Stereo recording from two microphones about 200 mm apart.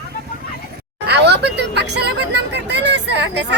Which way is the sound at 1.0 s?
55° right (ahead or behind).